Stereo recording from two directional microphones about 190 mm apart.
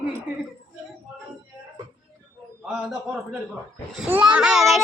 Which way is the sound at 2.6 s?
5° right (ahead or behind).